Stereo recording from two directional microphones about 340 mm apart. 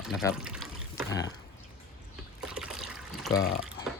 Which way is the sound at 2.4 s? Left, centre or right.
Centre.